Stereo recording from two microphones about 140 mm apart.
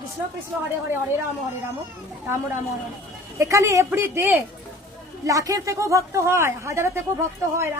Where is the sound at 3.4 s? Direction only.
20° right (ahead or behind).